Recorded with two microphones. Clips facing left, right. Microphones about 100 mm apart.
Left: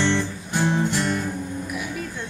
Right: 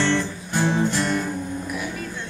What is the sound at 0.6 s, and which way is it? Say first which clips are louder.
Music: right 1 dB; 10° left (ahead or behind).